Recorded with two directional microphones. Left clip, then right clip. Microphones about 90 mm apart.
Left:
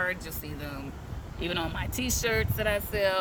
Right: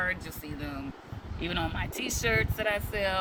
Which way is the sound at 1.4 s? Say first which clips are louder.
Left 1 dB; 50° left (ahead or behind).